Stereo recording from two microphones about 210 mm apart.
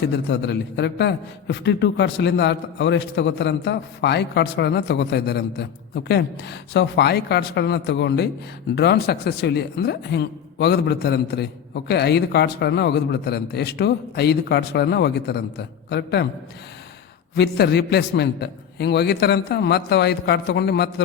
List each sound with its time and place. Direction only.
0.0 s a man's voice: 55° left (ahead or behind)
17.3 s a man's voice: 50° left (ahead or behind)